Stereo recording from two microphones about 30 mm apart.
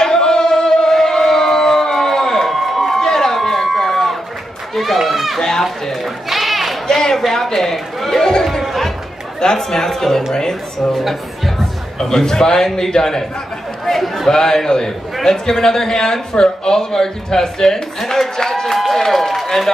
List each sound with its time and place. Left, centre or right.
0.0 s music: left
2.5 s a sound: centre
3.0 s a sound: centre
4.7 s run: centre
5.6 s speech: centre
6.3 s a sound: centre
7.1 s speech: centre
8.6 s chatter: centre
9.6 s speech: centre
11.0 s speech: centre
12.0 s speech: left
13.8 s speech: centre
14.3 s speech: left; by 19.4 s centre
19.4 s run: centre